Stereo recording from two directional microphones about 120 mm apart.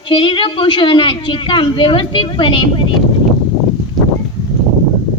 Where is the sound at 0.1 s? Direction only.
45° left (ahead or behind).